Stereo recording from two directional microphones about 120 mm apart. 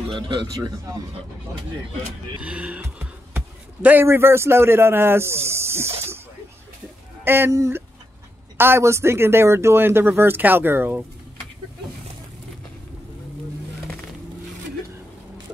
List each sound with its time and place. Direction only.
0.1 s speech: 40° right (ahead or behind)
2.4 s speech: 10° right (ahead or behind)
7.2 s speech: 20° right (ahead or behind)